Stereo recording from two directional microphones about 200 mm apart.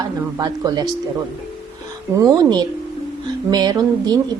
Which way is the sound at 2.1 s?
20° right (ahead or behind).